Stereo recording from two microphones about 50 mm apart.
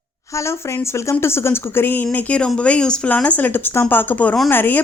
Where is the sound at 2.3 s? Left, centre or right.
Left.